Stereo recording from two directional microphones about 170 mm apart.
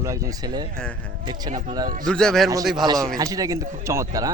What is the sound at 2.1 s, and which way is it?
Speech, 5° left (ahead or behind).